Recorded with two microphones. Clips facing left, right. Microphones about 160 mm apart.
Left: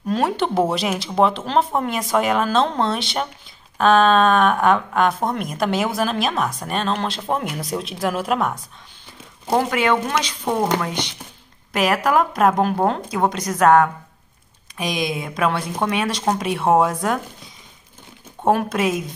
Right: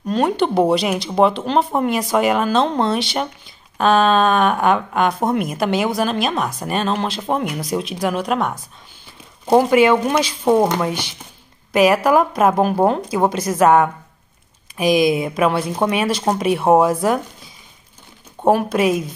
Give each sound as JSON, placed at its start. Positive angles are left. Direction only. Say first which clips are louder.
{"t": 0.1, "sound": "speech", "louder": "right 3 dB", "side_deg": 0}
{"t": 9.5, "sound": "speech", "louder": "right 6 dB", "side_deg": -10}
{"t": 18.4, "sound": "speech", "louder": "right 3 dB", "side_deg": 0}